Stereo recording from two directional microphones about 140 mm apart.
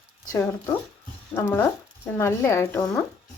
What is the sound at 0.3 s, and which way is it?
Speech, 20° left (ahead or behind).